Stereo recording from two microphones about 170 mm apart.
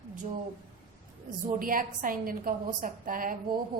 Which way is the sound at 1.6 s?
55° right (ahead or behind).